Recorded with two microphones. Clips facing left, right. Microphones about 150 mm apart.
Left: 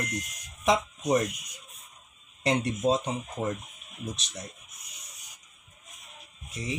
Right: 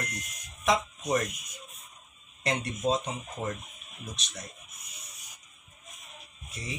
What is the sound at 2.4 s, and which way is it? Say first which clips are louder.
Speech: left 4 dB; 20° left (ahead or behind).